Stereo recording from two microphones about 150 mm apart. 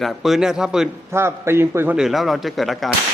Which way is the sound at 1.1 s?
15° right (ahead or behind).